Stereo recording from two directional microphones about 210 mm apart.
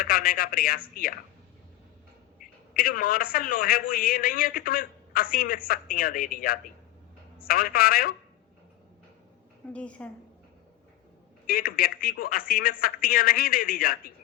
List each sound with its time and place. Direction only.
0.0 s a man's voice: 45° left (ahead or behind)
2.4 s a man's voice: 45° left (ahead or behind)
9.7 s a woman's voice: 5° left (ahead or behind)
11.4 s a man's voice: 45° left (ahead or behind)